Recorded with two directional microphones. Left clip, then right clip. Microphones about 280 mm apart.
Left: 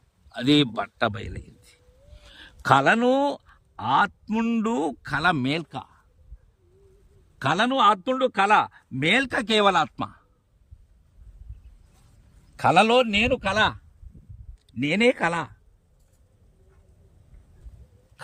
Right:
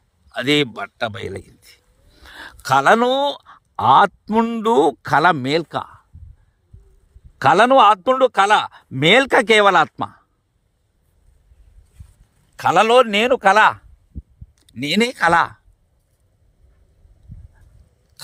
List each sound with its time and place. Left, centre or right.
0.3 s a man's voice: centre
7.3 s a man's voice: centre
12.5 s a man's voice: centre